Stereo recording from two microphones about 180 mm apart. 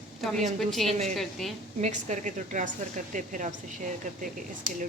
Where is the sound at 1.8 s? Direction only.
40° right (ahead or behind).